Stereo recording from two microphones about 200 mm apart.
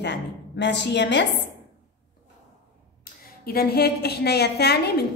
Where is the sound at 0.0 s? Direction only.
60° left (ahead or behind).